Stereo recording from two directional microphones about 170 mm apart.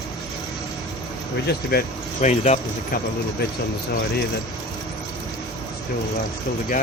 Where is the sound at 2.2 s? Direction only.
45° left (ahead or behind).